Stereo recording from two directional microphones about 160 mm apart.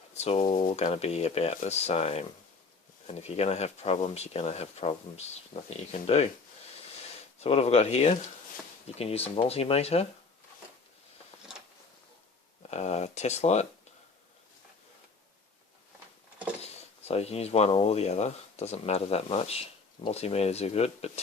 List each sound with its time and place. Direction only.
0.2 s speech: 40° left (ahead or behind)
7.3 s speech: 40° left (ahead or behind)
12.7 s speech: 45° left (ahead or behind)
17.1 s speech: 40° left (ahead or behind)